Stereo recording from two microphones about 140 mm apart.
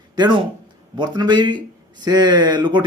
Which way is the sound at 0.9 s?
30° right (ahead or behind).